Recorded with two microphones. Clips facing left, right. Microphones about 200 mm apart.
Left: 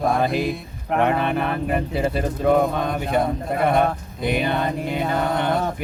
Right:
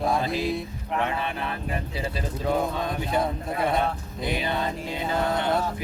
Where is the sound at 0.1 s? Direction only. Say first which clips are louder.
Left 4 dB; 55° left (ahead or behind).